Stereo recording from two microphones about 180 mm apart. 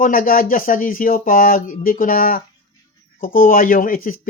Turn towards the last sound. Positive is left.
turn(degrees=50)  # may be behind; listen again after turning